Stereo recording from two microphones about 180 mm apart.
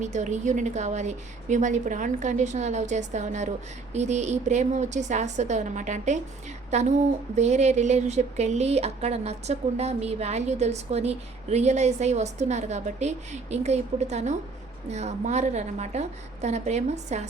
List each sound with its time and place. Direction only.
0.0 s speech: 40° right (ahead or behind)